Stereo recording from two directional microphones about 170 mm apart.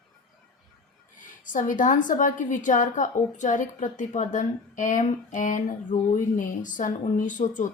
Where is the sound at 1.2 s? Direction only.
50° left (ahead or behind).